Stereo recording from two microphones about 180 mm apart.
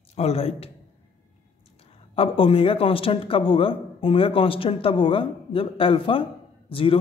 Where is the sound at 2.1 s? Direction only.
30° left (ahead or behind).